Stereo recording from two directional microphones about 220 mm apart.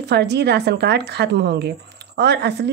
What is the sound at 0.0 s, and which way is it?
A woman's voice, 50° right (ahead or behind).